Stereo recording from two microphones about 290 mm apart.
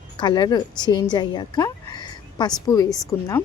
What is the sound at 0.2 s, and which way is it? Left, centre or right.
A woman's voice, centre.